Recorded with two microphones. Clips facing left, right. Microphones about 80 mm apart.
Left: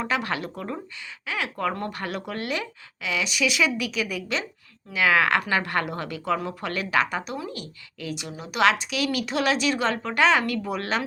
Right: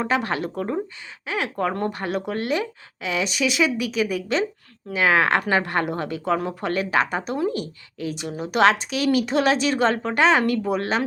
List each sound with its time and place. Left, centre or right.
0.0 s a woman's voice: right